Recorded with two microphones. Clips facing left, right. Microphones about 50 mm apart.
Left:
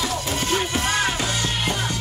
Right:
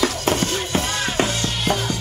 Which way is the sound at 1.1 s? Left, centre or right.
Right.